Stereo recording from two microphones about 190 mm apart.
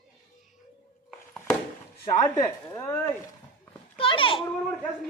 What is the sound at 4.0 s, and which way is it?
Speech, 30° left (ahead or behind).